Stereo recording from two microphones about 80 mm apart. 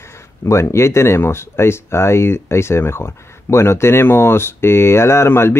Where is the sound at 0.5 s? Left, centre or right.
Left.